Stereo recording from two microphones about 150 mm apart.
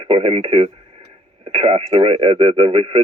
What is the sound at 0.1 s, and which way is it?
Speech, 35° right (ahead or behind).